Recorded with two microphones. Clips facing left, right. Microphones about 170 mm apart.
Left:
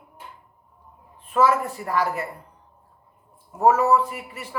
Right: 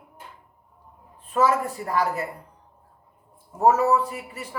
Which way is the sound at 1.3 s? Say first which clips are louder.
Left 1 dB; 35° right (ahead or behind).